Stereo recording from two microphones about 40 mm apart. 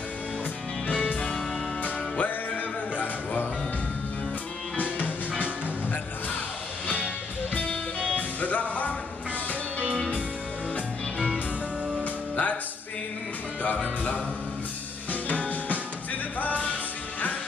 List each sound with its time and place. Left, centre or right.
0.8 s music: left
7.5 s music: left
8.2 s music: left
12.0 s music: left
15.2 s music: left